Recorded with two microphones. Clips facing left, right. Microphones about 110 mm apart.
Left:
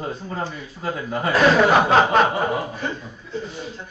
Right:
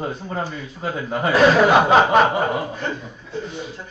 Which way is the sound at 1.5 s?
5° right (ahead or behind).